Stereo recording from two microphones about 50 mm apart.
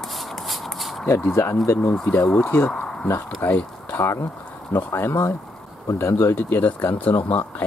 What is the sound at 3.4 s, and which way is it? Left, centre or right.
Speech, left.